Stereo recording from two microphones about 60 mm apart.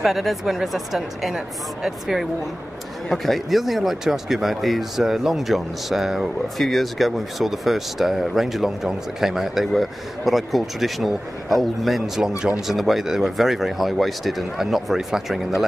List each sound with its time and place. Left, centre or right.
0.0 s speech: centre